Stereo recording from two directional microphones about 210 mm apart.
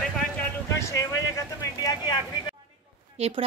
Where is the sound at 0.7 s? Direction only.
15° left (ahead or behind).